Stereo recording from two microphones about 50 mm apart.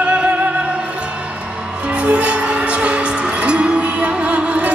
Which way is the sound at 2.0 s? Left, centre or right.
Right.